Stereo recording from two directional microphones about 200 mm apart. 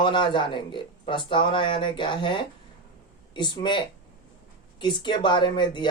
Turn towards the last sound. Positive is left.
turn(degrees=25)  # may be behind; listen again after turning